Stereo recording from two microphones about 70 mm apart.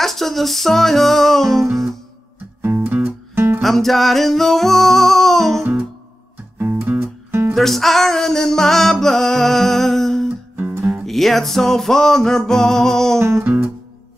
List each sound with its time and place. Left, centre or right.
0.0 s music: centre
2.6 s music: right
3.6 s music: centre
6.6 s music: right
7.5 s music: centre
13.2 s music: right